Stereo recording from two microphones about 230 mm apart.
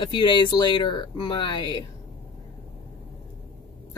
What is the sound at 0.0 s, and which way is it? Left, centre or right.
Speech, left.